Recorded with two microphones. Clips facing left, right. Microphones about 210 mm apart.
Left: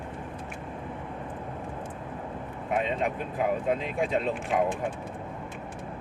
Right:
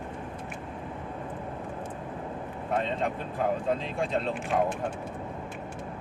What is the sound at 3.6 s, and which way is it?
Speech, 5° left (ahead or behind).